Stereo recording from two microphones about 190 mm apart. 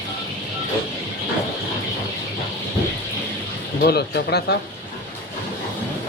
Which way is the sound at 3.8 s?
60° left (ahead or behind).